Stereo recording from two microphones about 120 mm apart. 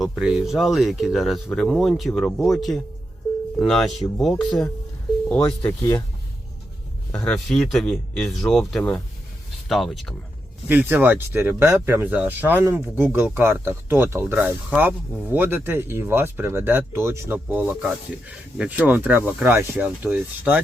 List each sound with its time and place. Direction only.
0.2 s speech: 5° right (ahead or behind)
5.3 s speech: 15° left (ahead or behind)
7.1 s speech: 20° left (ahead or behind)
7.3 s speech: 5° left (ahead or behind)
10.7 s speech: 15° right (ahead or behind)